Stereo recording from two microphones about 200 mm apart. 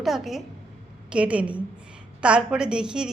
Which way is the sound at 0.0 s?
Centre (ahead or behind).